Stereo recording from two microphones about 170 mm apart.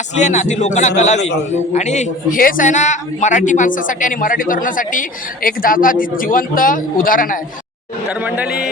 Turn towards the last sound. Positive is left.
turn(degrees=55)  # may be behind; listen again after turning